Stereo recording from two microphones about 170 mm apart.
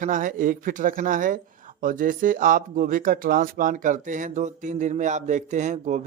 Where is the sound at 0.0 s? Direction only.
50° right (ahead or behind).